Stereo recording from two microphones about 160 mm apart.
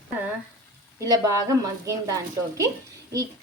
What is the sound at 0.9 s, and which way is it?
A woman's voice, 20° right (ahead or behind).